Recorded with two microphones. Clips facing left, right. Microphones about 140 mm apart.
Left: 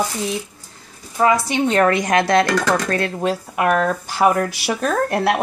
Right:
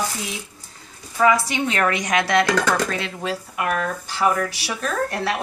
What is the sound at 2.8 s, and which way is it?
Speech, 50° left (ahead or behind).